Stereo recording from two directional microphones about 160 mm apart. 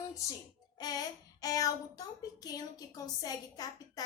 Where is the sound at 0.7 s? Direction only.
25° left (ahead or behind).